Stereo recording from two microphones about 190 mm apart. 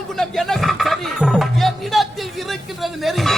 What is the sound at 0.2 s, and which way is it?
Music, centre (ahead or behind).